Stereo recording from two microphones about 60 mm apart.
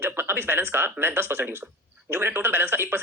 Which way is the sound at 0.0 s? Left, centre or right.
Right.